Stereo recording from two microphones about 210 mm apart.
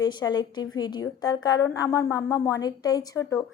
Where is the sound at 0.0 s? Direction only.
20° left (ahead or behind).